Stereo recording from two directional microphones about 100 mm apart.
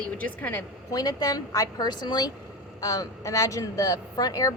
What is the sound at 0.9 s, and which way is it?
Speech, 40° left (ahead or behind).